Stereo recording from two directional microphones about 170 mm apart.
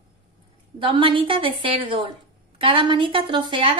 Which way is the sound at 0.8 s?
30° right (ahead or behind).